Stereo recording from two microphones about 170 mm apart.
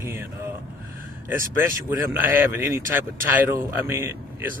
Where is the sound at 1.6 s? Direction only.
10° right (ahead or behind).